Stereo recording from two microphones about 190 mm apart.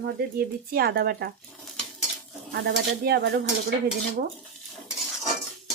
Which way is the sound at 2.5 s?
60° right (ahead or behind).